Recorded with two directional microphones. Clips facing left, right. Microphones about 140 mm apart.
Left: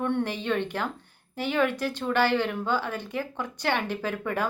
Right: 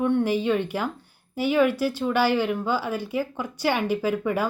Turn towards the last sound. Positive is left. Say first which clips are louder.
# right 5 dB
turn(degrees=-5)  # may be behind; listen again after turning